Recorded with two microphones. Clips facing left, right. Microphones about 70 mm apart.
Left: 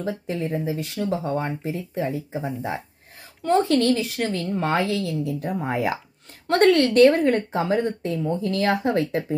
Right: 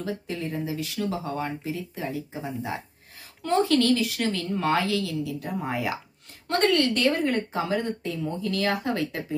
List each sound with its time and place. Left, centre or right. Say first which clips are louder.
0.0 s speech: left 4 dB; left
3.4 s speech: left 3 dB; left
5.7 s speech: left 5 dB; left
7.5 s speech: left 4 dB; left